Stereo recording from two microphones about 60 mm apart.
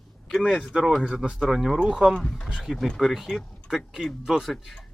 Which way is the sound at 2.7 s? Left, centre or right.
Centre.